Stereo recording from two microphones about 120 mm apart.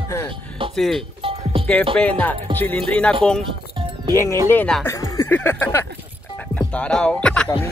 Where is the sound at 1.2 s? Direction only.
50° right (ahead or behind).